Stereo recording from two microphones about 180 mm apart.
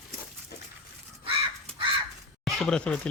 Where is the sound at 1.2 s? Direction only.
30° right (ahead or behind).